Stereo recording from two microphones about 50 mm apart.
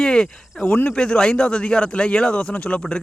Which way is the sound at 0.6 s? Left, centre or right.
Left.